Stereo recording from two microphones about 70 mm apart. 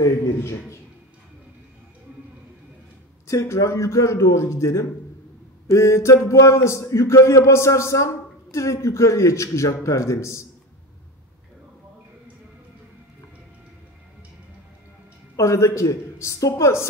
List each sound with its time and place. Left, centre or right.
0.4 s a man's voice: left
3.3 s speech: left
15.3 s speech: left